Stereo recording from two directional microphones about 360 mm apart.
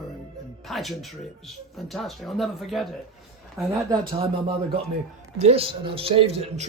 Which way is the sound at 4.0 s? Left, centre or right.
Right.